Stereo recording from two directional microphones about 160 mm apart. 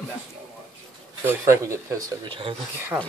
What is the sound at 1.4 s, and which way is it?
Speech, 20° right (ahead or behind).